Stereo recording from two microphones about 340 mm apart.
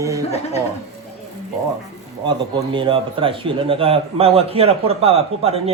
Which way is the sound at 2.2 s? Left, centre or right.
Centre.